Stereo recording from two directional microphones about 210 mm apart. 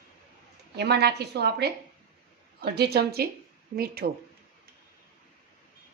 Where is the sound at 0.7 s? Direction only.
50° right (ahead or behind).